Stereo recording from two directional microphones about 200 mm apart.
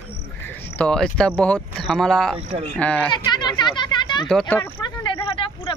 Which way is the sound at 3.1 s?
20° left (ahead or behind).